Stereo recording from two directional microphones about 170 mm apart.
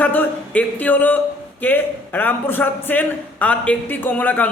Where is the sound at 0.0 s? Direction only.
10° left (ahead or behind).